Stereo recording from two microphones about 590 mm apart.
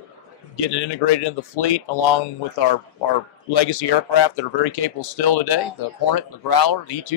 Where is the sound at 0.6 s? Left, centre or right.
Left.